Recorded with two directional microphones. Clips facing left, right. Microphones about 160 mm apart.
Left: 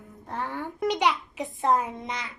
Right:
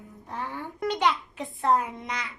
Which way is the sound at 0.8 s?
15° left (ahead or behind).